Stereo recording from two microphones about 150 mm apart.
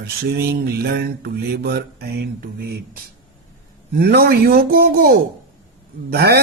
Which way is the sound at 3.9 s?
90° right.